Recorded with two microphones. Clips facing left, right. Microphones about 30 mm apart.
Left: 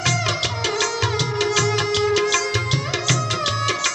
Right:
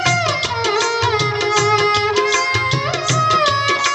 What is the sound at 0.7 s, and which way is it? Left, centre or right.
Music, centre.